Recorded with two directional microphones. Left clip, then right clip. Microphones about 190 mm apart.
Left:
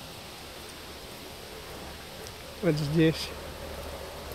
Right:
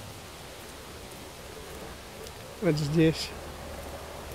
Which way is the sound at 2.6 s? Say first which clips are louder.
Even; 15° right (ahead or behind).